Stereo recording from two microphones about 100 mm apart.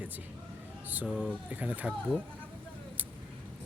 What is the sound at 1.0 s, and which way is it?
Speech, centre (ahead or behind).